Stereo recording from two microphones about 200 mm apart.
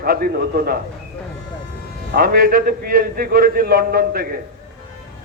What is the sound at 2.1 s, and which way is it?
A man's voice, 45° right (ahead or behind).